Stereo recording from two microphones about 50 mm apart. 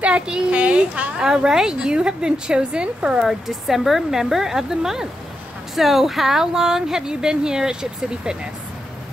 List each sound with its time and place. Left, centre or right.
0.0 s a child's voice: right
1.1 s speech: centre
3.3 s speech: centre